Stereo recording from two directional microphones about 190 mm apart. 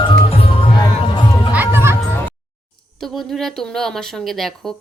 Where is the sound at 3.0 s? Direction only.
Centre (ahead or behind).